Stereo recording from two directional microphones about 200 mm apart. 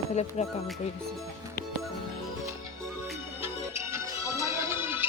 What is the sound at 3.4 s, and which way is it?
Music, 15° right (ahead or behind).